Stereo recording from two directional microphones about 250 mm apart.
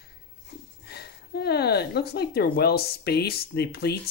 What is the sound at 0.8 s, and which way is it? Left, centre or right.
Speech, left.